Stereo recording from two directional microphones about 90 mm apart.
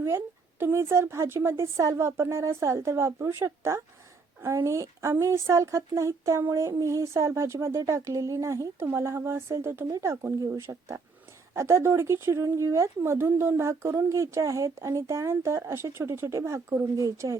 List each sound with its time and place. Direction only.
0.6 s speech: 30° right (ahead or behind)